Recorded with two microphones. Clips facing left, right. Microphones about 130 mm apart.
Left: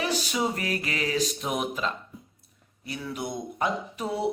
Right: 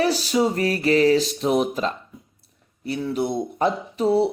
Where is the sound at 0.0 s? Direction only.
35° right (ahead or behind).